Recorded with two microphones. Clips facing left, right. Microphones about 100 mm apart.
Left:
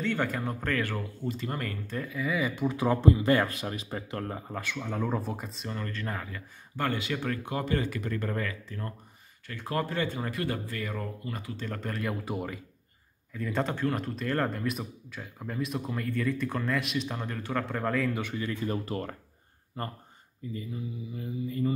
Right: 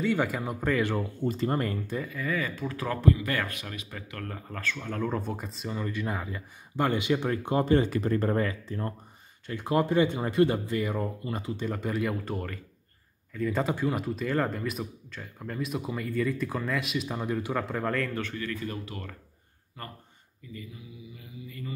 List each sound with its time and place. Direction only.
0.0 s speech: 5° right (ahead or behind)
1.3 s speech: 35° right (ahead or behind)
1.9 s speech: centre (ahead or behind); by 3.0 s 15° left (ahead or behind)
3.0 s speech: 25° left (ahead or behind); by 8.9 s 30° right (ahead or behind)
9.5 s speech: 20° right (ahead or behind)
11.6 s speech: 10° right (ahead or behind)
18.2 s speech: 15° left (ahead or behind)
18.9 s mantra: 35° left (ahead or behind)
20.7 s mantra: 40° left (ahead or behind)